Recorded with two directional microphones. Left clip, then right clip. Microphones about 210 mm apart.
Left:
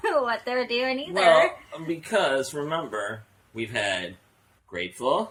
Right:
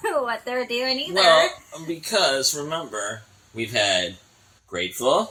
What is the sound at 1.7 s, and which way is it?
Speech, 15° left (ahead or behind).